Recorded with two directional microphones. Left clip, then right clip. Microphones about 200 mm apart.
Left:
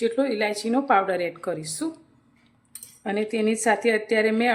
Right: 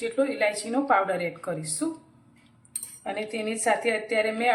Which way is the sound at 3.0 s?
65° left (ahead or behind).